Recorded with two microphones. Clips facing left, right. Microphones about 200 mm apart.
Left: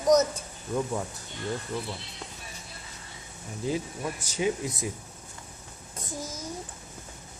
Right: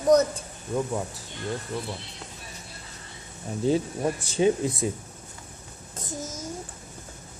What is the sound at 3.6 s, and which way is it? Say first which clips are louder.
Speech: right 7 dB; 30° right (ahead or behind).